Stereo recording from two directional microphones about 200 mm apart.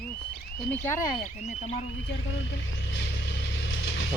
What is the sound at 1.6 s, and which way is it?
Speech, 35° left (ahead or behind).